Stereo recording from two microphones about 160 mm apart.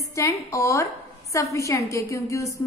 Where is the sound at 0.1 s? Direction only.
20° left (ahead or behind).